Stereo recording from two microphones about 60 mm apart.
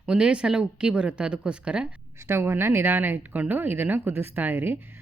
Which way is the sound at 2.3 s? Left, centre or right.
Right.